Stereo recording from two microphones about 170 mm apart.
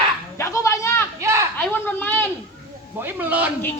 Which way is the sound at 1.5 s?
10° left (ahead or behind).